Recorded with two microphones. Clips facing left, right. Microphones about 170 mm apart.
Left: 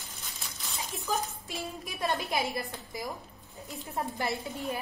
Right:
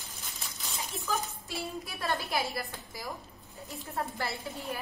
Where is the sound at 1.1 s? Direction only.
20° left (ahead or behind).